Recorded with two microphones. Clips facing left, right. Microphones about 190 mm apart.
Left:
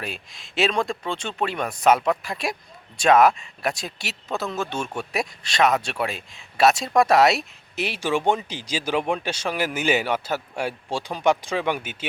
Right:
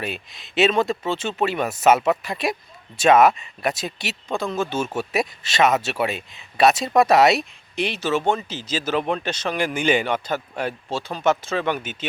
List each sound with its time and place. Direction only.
0.0 s speech: centre (ahead or behind)